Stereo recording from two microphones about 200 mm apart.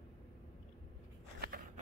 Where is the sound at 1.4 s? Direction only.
45° right (ahead or behind).